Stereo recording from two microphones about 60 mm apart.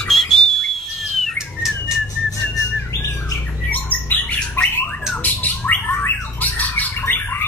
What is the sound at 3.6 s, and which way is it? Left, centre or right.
Bird, left.